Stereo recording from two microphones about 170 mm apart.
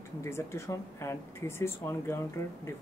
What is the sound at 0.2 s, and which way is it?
Speech, 15° left (ahead or behind).